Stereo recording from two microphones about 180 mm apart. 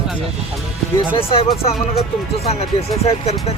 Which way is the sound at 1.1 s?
30° left (ahead or behind).